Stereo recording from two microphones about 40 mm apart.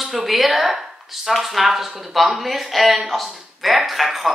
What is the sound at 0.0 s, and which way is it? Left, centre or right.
Speech, centre.